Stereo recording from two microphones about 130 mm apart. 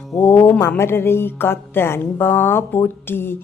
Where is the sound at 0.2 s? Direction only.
15° left (ahead or behind).